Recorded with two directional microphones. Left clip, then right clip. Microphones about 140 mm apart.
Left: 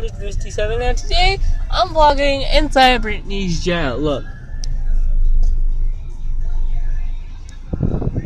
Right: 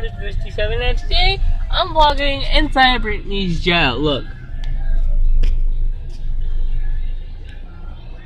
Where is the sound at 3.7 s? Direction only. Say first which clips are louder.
Right 4 dB; 30° right (ahead or behind).